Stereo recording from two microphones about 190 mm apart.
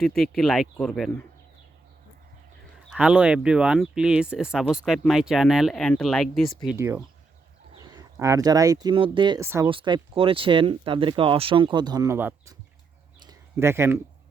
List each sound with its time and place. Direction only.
0.0 s speech: centre (ahead or behind)
2.9 s speech: 5° right (ahead or behind)
6.7 s speech: 15° right (ahead or behind)
9.4 s speech: 15° right (ahead or behind)
9.6 s speech: 25° right (ahead or behind)
13.2 s a sound: 15° right (ahead or behind)